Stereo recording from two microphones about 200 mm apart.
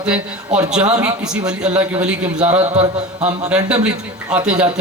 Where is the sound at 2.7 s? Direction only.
30° right (ahead or behind).